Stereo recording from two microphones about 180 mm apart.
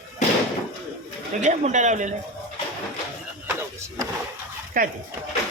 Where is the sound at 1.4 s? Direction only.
40° right (ahead or behind).